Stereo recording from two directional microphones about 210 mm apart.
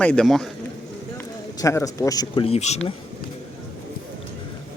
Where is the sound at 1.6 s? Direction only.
15° left (ahead or behind); by 2.9 s 30° left (ahead or behind).